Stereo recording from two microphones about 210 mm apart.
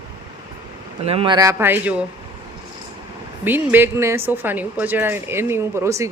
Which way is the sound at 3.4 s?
10° right (ahead or behind).